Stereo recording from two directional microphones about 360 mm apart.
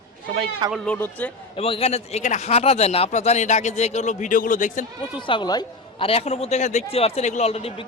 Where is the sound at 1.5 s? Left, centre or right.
Centre.